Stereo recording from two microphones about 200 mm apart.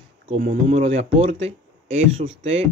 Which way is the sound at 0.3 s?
35° right (ahead or behind).